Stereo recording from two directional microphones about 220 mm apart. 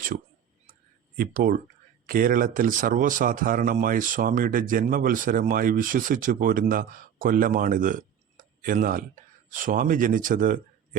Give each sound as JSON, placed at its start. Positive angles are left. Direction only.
{"t": 1.1, "sound": "speech", "side_deg": -40}